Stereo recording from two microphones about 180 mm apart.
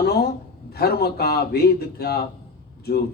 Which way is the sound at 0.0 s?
65° left (ahead or behind).